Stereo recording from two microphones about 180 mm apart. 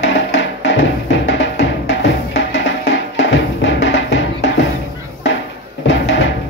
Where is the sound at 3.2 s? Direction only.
85° left.